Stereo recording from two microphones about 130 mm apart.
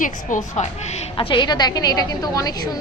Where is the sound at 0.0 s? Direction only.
75° left (ahead or behind).